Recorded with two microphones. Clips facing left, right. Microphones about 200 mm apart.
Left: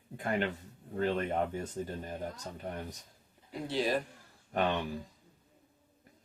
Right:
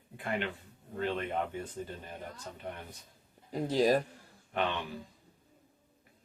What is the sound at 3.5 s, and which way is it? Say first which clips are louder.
Speech: right 5 dB; 40° right (ahead or behind).